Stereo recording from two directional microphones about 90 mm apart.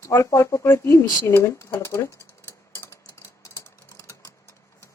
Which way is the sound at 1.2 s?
30° left (ahead or behind).